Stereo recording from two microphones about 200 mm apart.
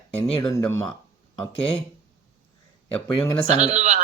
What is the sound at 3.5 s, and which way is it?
Speech, 35° right (ahead or behind).